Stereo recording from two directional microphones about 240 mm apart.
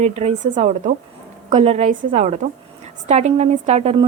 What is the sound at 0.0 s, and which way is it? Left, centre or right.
A woman's voice, right.